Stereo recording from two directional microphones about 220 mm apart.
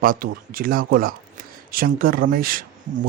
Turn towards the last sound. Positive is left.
turn(degrees=-40)  # may be behind; listen again after turning